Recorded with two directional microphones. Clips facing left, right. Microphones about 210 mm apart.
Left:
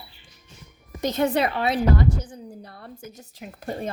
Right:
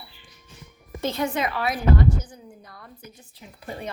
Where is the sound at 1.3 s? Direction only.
30° left (ahead or behind).